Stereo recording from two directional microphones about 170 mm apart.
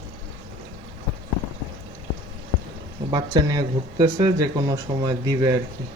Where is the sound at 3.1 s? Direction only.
25° right (ahead or behind).